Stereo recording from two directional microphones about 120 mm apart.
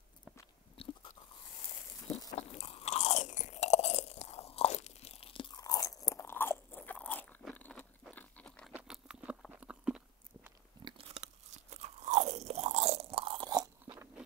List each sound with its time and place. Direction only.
0.8 s biting: 50° left (ahead or behind)
2.3 s crunch: 60° left (ahead or behind); by 5.6 s 45° left (ahead or behind)
5.6 s crunch: 30° left (ahead or behind)
7.5 s a sound: 15° left (ahead or behind)
8.7 s patter: 5° right (ahead or behind)
9.6 s chewing: 5° right (ahead or behind)
10.8 s biting: 40° right (ahead or behind)
11.1 s crunch: 65° right (ahead or behind); by 13.7 s 40° right (ahead or behind)